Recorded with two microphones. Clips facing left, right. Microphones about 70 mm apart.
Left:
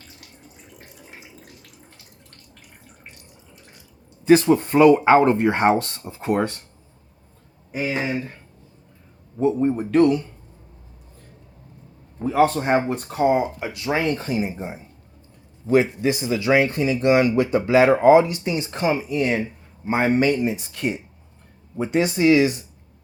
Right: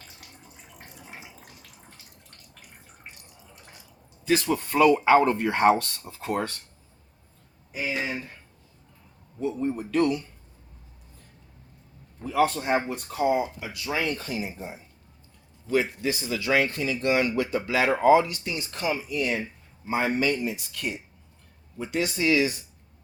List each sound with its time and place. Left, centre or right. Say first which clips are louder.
0.7 s water tap: right 1 dB; centre
4.3 s speech: left 9 dB; left
7.7 s speech: left 5 dB; left
9.4 s speech: left 8 dB; left
12.2 s speech: left 5 dB; left
13.9 s speech: left 6 dB; left
20.4 s speech: left 7 dB; left